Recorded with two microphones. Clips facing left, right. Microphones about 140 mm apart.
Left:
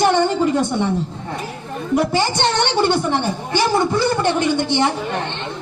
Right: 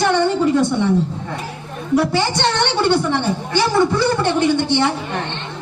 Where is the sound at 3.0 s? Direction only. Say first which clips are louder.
Right 1 dB; 45° left (ahead or behind).